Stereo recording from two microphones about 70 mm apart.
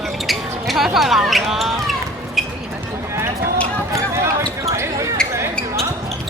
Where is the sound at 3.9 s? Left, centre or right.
Right.